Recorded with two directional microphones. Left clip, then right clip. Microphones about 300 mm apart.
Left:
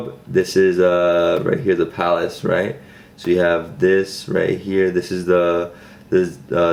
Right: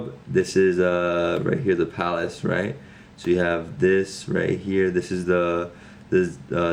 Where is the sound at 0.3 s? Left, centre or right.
Centre.